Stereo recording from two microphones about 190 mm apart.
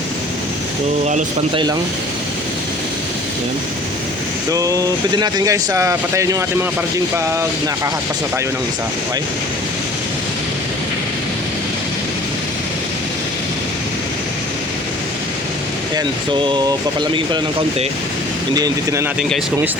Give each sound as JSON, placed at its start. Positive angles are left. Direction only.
{"t": 4.5, "sound": "speech", "side_deg": -15}
{"t": 16.0, "sound": "speech", "side_deg": -25}